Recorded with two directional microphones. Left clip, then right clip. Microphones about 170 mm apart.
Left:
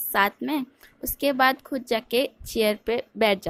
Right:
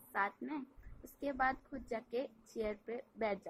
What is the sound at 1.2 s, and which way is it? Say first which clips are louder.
A woman's voice: left 15 dB; 55° left (ahead or behind).